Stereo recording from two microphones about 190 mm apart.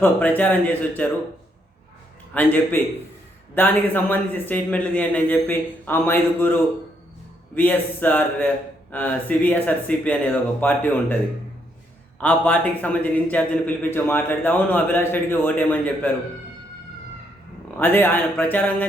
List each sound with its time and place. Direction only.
0.0 s a man's voice: 10° left (ahead or behind)
2.3 s a man's voice: 10° left (ahead or behind)
7.5 s a man's voice: 10° left (ahead or behind)
12.2 s a man's voice: 10° left (ahead or behind)
17.7 s a man's voice: 10° left (ahead or behind)